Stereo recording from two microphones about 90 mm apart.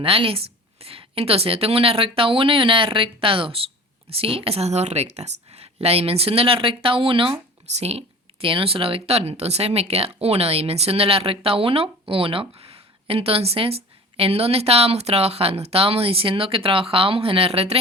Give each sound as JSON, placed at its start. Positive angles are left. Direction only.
{"t": 0.0, "sound": "speech", "side_deg": -90}
{"t": 5.8, "sound": "speech", "side_deg": -90}
{"t": 8.4, "sound": "speech", "side_deg": -85}